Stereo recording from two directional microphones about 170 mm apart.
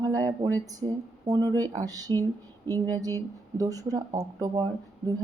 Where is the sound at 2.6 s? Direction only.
10° left (ahead or behind).